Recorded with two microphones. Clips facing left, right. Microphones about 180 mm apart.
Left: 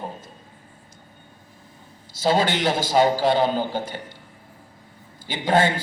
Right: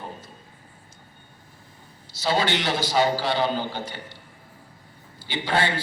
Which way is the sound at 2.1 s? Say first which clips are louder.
Left 3 dB; 45° left (ahead or behind).